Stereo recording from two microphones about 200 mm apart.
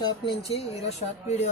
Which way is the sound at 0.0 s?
25° left (ahead or behind).